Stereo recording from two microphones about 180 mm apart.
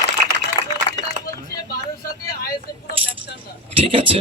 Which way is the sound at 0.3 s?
75° right (ahead or behind).